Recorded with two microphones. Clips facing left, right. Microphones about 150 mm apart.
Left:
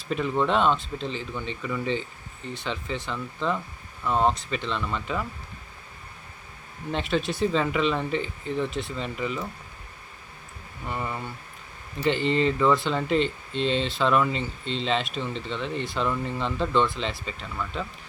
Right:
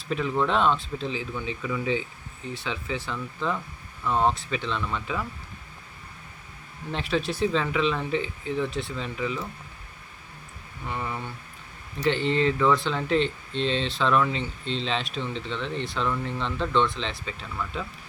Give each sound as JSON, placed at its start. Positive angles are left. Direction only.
{"t": 0.1, "sound": "speech", "side_deg": 0}
{"t": 6.9, "sound": "speech", "side_deg": 0}
{"t": 10.8, "sound": "speech", "side_deg": 0}